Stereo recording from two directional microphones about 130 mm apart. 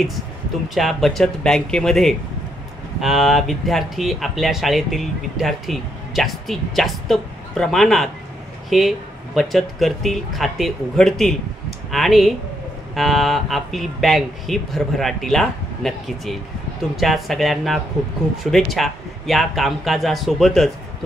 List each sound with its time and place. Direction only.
0.7 s speech: centre (ahead or behind)